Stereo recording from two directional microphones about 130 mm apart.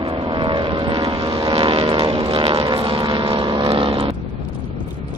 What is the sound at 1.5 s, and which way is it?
Vehicle, 45° right (ahead or behind).